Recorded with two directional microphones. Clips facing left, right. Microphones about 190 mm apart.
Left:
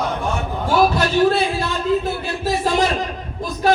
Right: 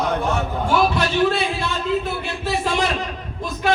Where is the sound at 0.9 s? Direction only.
40° left (ahead or behind).